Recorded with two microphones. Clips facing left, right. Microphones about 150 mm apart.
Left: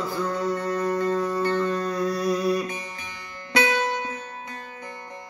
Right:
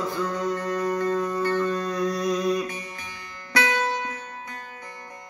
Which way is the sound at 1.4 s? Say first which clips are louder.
Even; 20° left (ahead or behind).